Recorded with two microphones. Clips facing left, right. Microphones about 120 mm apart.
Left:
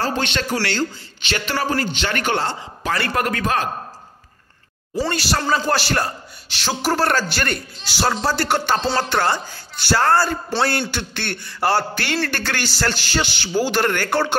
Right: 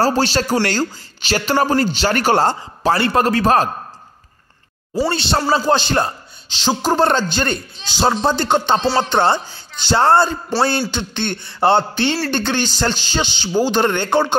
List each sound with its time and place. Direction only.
0.0 s a man's voice: 35° right (ahead or behind)
5.1 s a man's voice: 25° right (ahead or behind)